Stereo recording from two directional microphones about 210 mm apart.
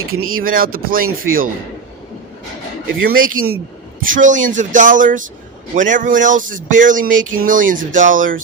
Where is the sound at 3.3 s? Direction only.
85° right.